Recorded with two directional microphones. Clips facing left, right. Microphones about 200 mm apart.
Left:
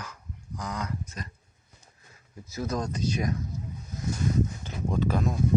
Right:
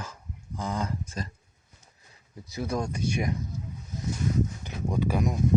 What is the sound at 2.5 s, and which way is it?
Speech, 10° right (ahead or behind).